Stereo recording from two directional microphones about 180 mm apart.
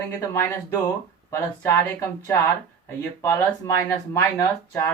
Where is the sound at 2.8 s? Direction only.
15° left (ahead or behind).